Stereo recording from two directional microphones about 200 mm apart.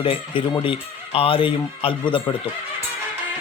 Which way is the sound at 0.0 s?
25° left (ahead or behind).